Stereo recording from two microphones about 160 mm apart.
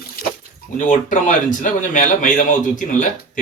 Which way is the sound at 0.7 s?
55° left (ahead or behind).